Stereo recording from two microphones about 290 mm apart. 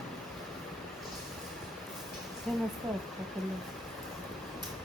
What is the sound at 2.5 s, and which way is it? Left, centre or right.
Speech, centre.